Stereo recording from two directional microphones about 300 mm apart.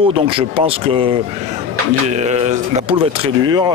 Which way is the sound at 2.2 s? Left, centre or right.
Right.